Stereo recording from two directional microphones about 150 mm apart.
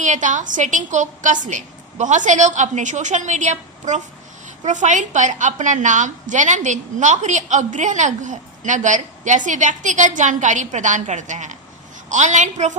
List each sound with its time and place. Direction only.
0.0 s a woman's voice: 55° right (ahead or behind)